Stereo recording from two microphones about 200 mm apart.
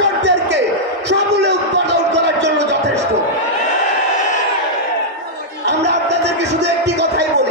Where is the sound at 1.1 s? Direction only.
60° right (ahead or behind).